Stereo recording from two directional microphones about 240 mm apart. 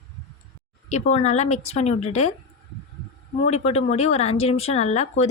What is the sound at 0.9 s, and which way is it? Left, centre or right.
Speech, left.